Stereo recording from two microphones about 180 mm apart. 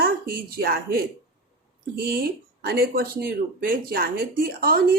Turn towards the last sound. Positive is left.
turn(degrees=-55)  # may be behind; listen again after turning